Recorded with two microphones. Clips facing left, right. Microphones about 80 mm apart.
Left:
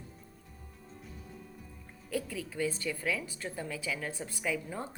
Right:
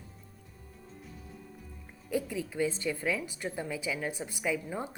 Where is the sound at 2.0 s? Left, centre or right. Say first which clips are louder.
Right 3 dB; centre.